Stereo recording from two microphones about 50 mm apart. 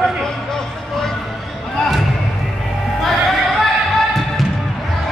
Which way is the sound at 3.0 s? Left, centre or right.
Centre.